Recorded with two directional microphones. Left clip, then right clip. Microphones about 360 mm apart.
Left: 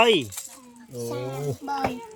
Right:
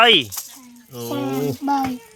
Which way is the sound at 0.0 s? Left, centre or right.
Centre.